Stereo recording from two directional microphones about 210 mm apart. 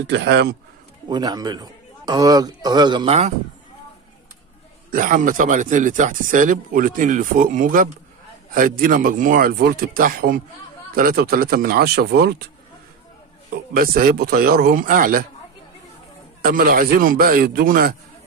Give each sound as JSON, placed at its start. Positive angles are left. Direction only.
{"t": 0.0, "sound": "a man's voice", "side_deg": -55}
{"t": 1.0, "sound": "a man's voice", "side_deg": -20}
{"t": 4.9, "sound": "a man's voice", "side_deg": -40}
{"t": 13.7, "sound": "a man's voice", "side_deg": -45}
{"t": 16.4, "sound": "a man's voice", "side_deg": -45}